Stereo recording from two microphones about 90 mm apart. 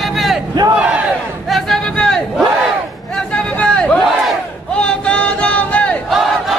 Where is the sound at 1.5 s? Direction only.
5° left (ahead or behind).